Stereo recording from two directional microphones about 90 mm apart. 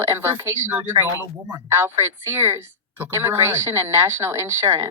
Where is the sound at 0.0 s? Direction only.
25° right (ahead or behind).